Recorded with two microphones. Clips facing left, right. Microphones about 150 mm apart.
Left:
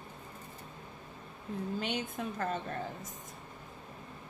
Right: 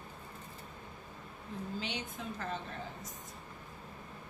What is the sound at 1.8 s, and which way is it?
Speech, 50° left (ahead or behind).